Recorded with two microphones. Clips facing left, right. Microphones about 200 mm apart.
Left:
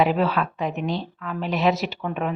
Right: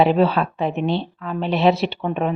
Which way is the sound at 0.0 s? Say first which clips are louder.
Right 4 dB; 30° right (ahead or behind).